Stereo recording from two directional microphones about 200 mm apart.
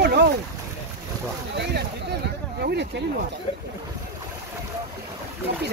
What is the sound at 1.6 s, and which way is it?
Speech, 55° right (ahead or behind).